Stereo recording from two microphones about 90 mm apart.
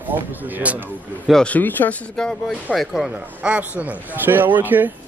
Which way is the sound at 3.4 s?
15° right (ahead or behind).